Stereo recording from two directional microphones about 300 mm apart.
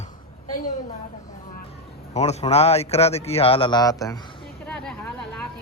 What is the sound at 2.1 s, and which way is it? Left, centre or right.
A man's voice, left.